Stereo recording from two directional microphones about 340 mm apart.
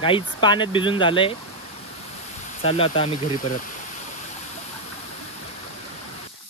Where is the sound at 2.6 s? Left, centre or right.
Centre.